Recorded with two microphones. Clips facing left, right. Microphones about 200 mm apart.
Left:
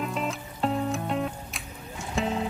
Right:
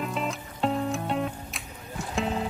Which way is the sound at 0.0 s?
Centre (ahead or behind).